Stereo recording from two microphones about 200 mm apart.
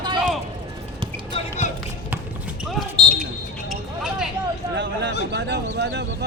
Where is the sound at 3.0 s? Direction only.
25° right (ahead or behind).